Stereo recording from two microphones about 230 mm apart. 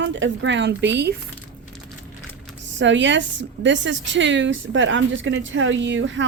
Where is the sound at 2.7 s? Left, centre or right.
Right.